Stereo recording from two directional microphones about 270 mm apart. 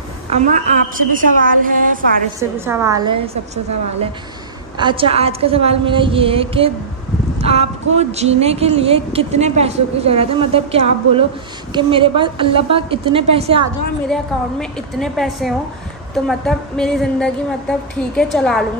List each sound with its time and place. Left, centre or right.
0.3 s a woman's voice: right
2.5 s a woman's voice: centre
4.7 s a woman's voice: centre
7.3 s a sound: right
7.9 s a woman's voice: right
14.0 s a woman's voice: centre